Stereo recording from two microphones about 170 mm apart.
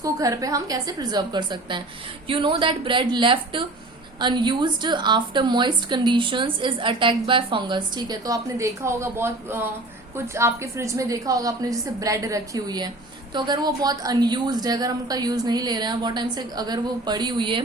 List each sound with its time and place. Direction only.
0.0 s a woman's voice: 20° right (ahead or behind)